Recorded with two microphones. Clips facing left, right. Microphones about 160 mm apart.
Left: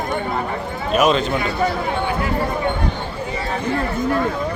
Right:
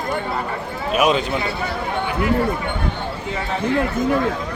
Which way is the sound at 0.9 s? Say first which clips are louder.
Left 1 dB; 10° right (ahead or behind).